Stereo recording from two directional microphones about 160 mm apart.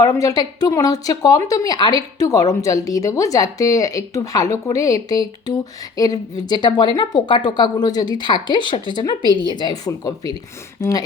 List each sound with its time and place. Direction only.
0.0 s a woman's voice: 20° left (ahead or behind)